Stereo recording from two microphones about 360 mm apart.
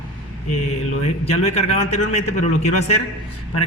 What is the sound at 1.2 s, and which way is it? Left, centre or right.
A man's voice, centre.